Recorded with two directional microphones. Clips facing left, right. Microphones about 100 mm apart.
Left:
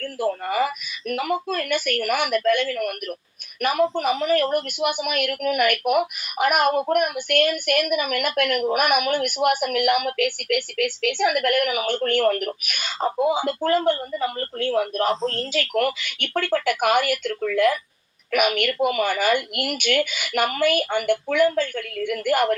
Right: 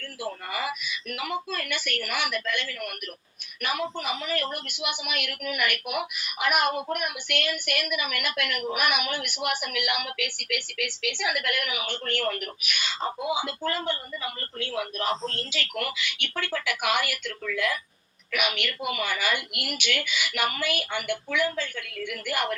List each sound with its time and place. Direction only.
0.0 s speech: 50° left (ahead or behind)